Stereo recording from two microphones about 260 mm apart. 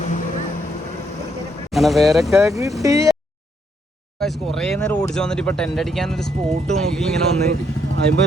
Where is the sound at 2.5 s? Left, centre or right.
Centre.